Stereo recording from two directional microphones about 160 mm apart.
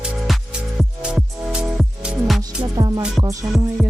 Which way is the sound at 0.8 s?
5° right (ahead or behind).